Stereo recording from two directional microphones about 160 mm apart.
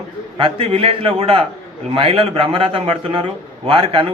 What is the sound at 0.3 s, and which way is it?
A man's voice, 35° right (ahead or behind).